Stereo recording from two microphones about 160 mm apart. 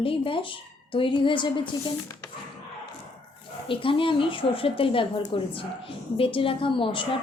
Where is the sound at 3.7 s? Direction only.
35° left (ahead or behind).